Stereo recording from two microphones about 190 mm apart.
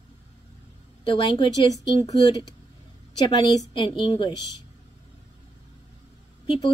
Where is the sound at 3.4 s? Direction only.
25° left (ahead or behind).